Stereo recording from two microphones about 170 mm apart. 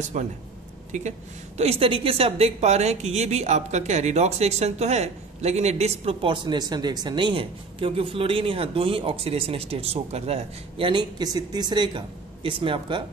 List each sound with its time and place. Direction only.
0.2 s speech: 45° right (ahead or behind)